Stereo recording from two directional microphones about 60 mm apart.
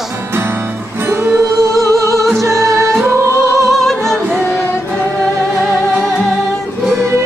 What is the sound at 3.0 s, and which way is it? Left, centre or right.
Music, right.